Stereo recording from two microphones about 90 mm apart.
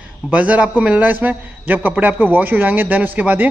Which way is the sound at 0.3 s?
15° right (ahead or behind).